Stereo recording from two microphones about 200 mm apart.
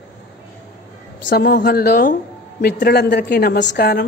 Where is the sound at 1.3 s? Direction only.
50° left (ahead or behind).